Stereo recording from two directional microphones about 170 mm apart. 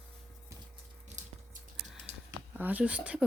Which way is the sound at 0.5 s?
15° right (ahead or behind).